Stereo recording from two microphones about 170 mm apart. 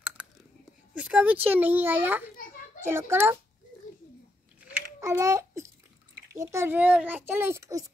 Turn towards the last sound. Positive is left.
turn(degrees=-20)  # may be behind; listen again after turning